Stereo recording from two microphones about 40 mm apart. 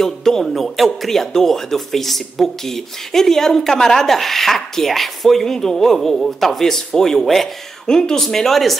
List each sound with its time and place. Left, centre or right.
0.0 s speech: centre
7.8 s speech: centre